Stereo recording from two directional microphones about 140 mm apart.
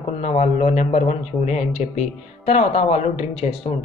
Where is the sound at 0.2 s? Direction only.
50° left (ahead or behind).